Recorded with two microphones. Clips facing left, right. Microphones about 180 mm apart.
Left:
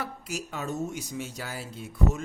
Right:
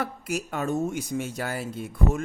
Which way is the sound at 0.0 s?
55° right (ahead or behind).